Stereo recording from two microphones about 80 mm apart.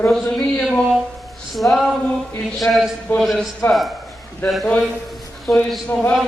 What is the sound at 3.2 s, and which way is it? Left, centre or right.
Speech, centre.